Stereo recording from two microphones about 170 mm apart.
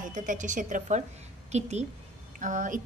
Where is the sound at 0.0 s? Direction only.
50° right (ahead or behind).